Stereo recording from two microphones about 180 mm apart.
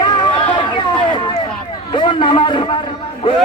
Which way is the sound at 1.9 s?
25° left (ahead or behind).